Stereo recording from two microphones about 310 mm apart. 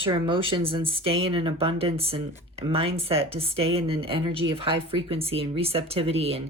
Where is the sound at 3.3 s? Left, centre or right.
Centre.